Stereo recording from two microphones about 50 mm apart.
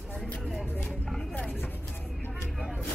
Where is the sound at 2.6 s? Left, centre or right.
Centre.